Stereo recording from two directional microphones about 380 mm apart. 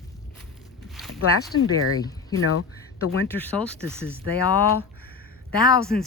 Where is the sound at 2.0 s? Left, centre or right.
Centre.